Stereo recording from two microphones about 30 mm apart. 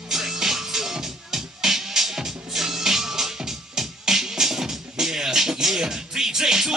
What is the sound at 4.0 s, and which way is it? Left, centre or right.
Speech, centre.